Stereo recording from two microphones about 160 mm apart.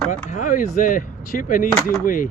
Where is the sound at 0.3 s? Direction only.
50° left (ahead or behind).